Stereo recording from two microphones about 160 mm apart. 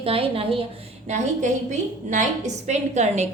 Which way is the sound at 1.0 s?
45° right (ahead or behind).